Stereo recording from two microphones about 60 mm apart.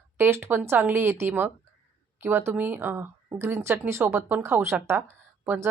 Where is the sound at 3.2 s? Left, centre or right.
Right.